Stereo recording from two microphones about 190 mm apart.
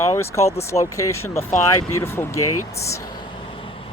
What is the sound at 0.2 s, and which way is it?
Speech, 15° left (ahead or behind).